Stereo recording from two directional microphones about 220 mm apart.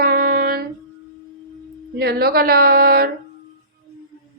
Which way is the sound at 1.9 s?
45° right (ahead or behind).